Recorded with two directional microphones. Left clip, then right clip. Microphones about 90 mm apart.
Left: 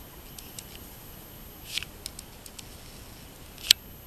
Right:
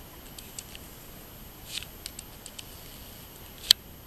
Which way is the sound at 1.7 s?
15° left (ahead or behind).